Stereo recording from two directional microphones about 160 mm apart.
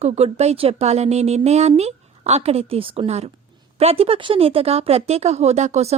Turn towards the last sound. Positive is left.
turn(degrees=-45)  # may be behind; listen again after turning